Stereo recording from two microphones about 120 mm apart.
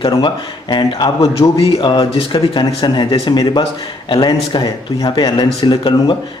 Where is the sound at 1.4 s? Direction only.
50° left (ahead or behind).